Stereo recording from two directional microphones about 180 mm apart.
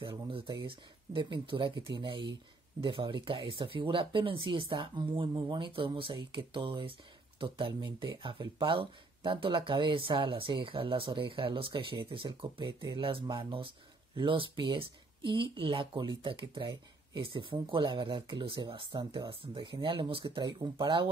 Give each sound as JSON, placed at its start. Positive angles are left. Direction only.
{"t": 0.0, "sound": "speech", "side_deg": -30}